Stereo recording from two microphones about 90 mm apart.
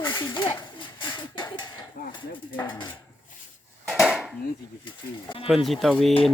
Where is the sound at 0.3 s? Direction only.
60° left (ahead or behind).